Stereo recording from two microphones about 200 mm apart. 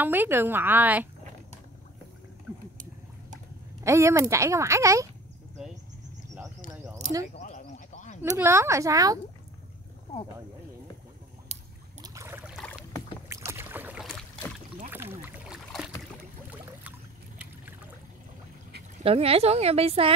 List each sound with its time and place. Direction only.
0.0 s speech: 10° right (ahead or behind)
2.5 s a sound: 15° right (ahead or behind)
3.8 s speech: 15° right (ahead or behind)
7.3 s a sound: 35° left (ahead or behind)
8.2 s speech: 10° right (ahead or behind)
12.0 s boat: 15° right (ahead or behind)
12.5 s rowboat: centre (ahead or behind)
13.5 s boat: 10° right (ahead or behind)
14.9 s rowboat: 10° right (ahead or behind)
19.0 s a woman's voice: 30° right (ahead or behind)